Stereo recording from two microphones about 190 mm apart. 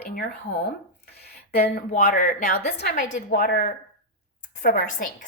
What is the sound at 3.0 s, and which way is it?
Speech, 45° left (ahead or behind).